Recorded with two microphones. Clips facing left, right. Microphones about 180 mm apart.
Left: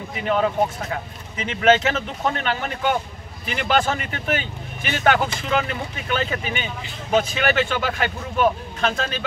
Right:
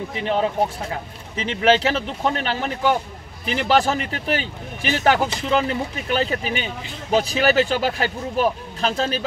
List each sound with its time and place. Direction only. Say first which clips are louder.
0.2 s speech: left 1 dB; 25° right (ahead or behind)